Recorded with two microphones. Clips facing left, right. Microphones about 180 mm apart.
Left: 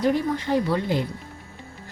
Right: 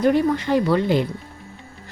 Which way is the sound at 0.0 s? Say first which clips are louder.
Right 5 dB; 65° right (ahead or behind).